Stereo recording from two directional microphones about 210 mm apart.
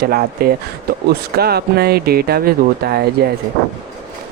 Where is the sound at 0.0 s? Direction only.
45° right (ahead or behind).